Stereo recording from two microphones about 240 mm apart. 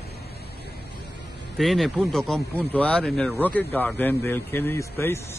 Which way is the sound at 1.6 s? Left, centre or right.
Centre.